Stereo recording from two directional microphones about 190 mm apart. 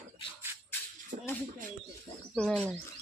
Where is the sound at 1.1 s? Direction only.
40° right (ahead or behind).